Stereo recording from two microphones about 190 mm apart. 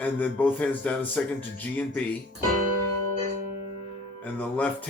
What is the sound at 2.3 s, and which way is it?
Speech, 45° right (ahead or behind).